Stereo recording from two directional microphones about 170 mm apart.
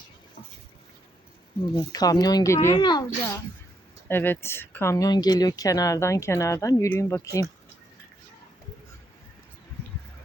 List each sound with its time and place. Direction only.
1.7 s speech: 25° left (ahead or behind)